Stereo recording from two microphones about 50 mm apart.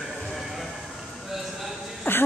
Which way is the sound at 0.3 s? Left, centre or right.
Centre.